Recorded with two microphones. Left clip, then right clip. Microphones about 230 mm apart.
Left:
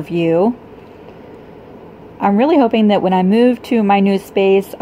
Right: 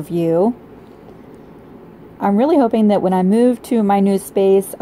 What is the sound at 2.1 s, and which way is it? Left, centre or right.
A woman's voice, centre.